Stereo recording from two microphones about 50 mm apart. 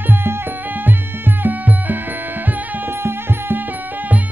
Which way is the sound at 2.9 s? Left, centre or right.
Right.